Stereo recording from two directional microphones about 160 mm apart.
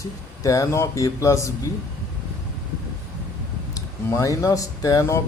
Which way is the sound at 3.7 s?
20° left (ahead or behind).